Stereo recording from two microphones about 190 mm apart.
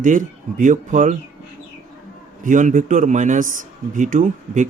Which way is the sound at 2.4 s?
45° right (ahead or behind).